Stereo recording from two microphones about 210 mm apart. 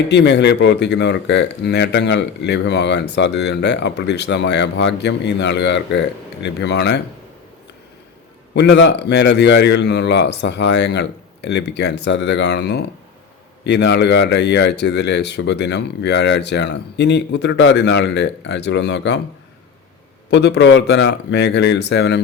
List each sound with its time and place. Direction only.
0.1 s speech: 55° left (ahead or behind)
8.5 s speech: 55° left (ahead or behind)
20.3 s speech: 55° left (ahead or behind)